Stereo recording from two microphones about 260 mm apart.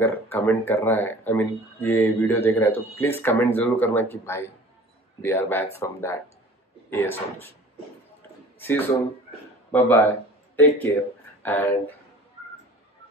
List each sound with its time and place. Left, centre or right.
0.0 s speech: centre
8.5 s speech: centre